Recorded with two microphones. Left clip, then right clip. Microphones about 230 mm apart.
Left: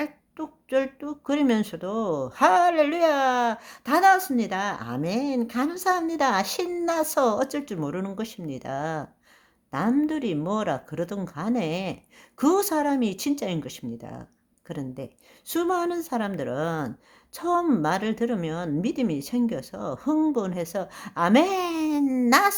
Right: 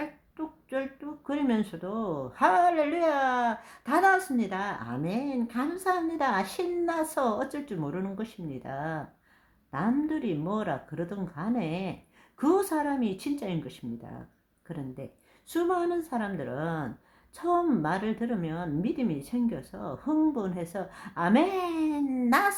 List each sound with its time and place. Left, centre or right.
0.0 s speech: left
15.4 s speech: left